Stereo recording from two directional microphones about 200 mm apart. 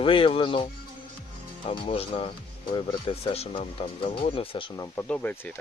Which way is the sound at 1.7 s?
30° left (ahead or behind).